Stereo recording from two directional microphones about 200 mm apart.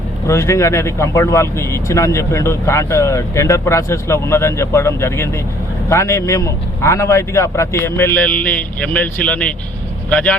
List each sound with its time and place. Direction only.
0.3 s speech: 15° left (ahead or behind)